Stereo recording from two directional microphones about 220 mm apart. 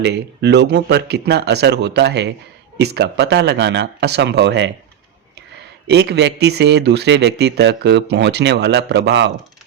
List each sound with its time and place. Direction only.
0.0 s speech: 50° right (ahead or behind)
5.9 s speech: 50° right (ahead or behind)